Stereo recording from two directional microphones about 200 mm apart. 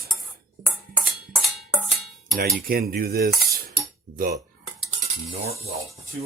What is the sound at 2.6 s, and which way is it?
Speech, 50° right (ahead or behind).